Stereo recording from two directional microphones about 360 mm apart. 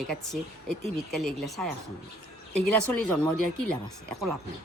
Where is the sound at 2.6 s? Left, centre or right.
Right.